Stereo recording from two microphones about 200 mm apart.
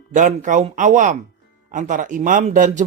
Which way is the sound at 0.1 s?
40° right (ahead or behind).